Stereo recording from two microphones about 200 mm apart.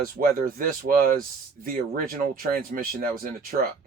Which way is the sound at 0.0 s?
45° right (ahead or behind).